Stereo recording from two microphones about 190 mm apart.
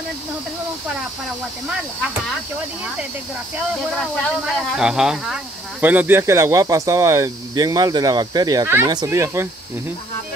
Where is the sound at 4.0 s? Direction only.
Centre (ahead or behind).